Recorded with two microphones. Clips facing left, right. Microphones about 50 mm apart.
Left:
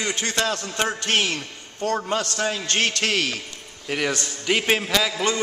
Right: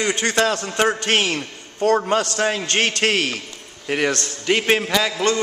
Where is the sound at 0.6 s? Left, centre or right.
Centre.